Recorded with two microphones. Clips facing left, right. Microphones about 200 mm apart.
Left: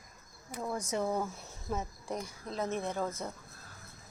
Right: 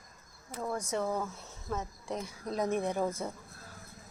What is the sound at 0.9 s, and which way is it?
Speech, 10° left (ahead or behind).